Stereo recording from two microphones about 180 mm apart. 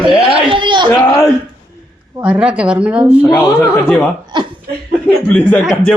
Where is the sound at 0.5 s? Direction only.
25° right (ahead or behind).